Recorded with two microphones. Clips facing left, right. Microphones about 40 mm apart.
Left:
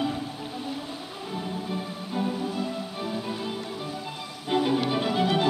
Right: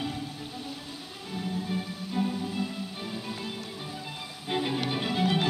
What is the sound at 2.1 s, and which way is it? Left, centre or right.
Music, centre.